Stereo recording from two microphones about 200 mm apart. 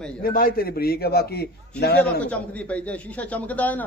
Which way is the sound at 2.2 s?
5° left (ahead or behind).